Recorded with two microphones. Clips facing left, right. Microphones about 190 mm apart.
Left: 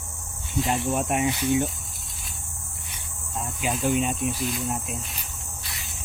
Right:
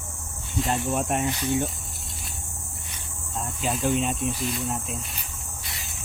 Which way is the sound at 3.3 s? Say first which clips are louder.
Even; centre (ahead or behind).